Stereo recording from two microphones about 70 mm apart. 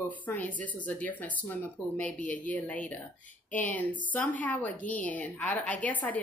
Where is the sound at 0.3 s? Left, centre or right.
Left.